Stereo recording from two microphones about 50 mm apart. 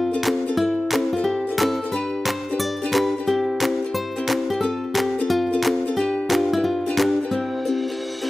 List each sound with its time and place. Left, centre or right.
0.0 s music: centre
2.9 s music: centre
5.6 s music: centre